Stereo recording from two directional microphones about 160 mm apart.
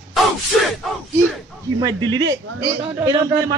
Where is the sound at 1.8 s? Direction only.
25° right (ahead or behind).